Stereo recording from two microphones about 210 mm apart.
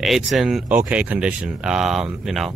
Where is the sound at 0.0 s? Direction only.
Centre (ahead or behind).